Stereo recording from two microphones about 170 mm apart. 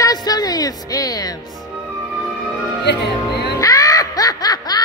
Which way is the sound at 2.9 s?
80° left.